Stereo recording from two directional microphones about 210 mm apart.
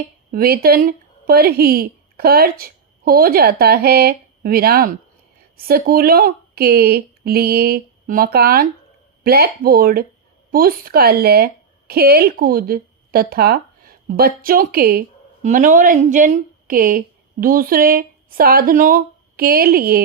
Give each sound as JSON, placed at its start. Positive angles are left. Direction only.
{"t": 0.3, "sound": "a woman's voice", "side_deg": -45}